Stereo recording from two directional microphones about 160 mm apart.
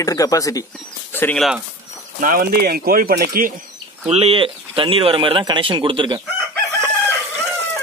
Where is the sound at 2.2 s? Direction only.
60° right (ahead or behind).